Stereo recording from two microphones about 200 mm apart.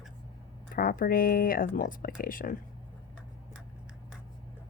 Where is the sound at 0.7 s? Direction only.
45° left (ahead or behind).